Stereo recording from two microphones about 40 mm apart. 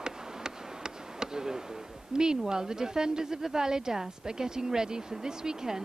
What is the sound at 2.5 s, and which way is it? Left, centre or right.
A woman's voice, centre.